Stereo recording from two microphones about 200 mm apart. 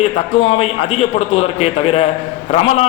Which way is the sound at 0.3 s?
30° left (ahead or behind).